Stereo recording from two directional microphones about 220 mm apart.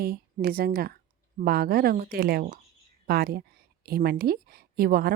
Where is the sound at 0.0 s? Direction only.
45° right (ahead or behind).